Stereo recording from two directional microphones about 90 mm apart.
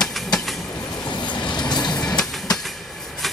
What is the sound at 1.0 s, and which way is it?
Train, 55° left (ahead or behind).